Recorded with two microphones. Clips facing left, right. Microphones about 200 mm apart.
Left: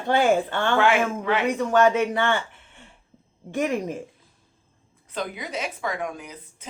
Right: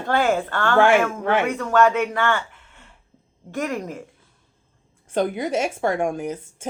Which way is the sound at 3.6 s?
20° left (ahead or behind).